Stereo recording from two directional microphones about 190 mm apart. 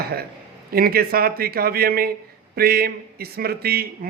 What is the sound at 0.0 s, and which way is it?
A man's voice, 55° right (ahead or behind).